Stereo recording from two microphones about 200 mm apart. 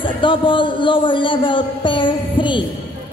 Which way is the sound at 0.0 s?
25° left (ahead or behind).